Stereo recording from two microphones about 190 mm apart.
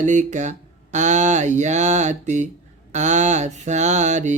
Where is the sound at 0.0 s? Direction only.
40° right (ahead or behind).